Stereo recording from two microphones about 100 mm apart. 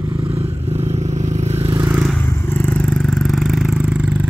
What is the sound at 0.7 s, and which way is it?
Vehicle, 90° right.